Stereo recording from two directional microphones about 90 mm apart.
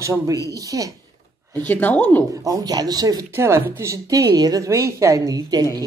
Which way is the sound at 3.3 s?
30° right (ahead or behind).